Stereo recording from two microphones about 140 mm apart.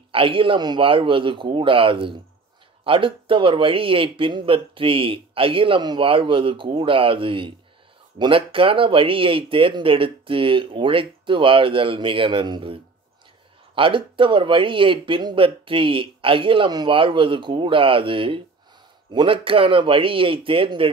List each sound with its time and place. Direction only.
0.1 s speech: 40° right (ahead or behind)